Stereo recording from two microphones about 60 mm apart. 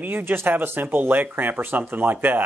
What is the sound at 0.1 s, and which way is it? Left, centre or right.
Speech, right.